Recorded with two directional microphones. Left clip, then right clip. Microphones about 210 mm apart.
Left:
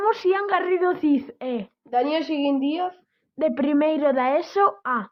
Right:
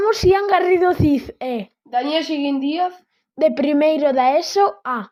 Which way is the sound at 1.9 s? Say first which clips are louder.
Right 2 dB; 20° left (ahead or behind).